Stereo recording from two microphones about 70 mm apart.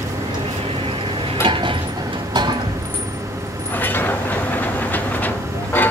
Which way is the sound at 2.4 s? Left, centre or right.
Right.